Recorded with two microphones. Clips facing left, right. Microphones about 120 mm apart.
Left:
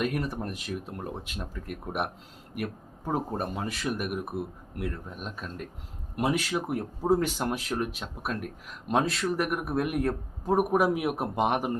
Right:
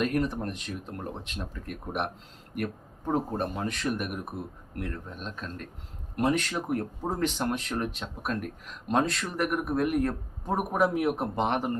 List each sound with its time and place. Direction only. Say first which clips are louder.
0.0 s speech: right 2 dB; 5° left (ahead or behind)